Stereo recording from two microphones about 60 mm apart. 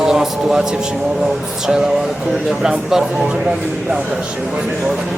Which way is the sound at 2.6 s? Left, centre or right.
Centre.